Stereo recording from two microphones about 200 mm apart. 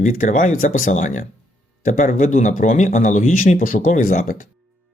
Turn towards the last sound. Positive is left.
turn(degrees=40)  # may be behind; listen again after turning